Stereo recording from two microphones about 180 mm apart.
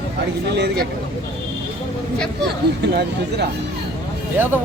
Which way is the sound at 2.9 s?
65° right (ahead or behind).